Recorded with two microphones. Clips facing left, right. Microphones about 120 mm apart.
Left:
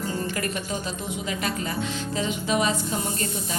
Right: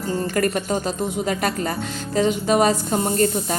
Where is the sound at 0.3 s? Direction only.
45° right (ahead or behind).